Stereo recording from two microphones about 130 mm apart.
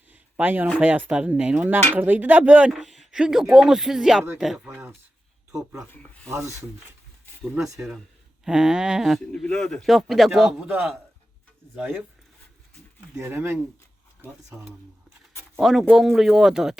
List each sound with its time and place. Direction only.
0.1 s a sound: 15° right (ahead or behind)
0.8 s a man's voice: 10° right (ahead or behind)
5.9 s speech: 10° left (ahead or behind)
7.5 s a man's voice: 10° right (ahead or behind)
13.1 s speech: 20° right (ahead or behind)
15.5 s a man's voice: centre (ahead or behind)